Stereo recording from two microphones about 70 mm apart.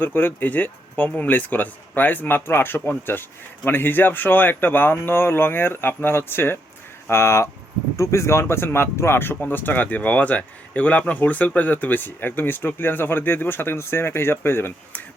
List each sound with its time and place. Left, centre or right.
0.0 s speech: left